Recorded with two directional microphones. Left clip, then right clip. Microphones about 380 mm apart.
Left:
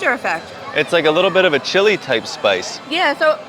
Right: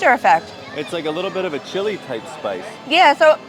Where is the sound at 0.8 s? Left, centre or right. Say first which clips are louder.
Left 9 dB; left.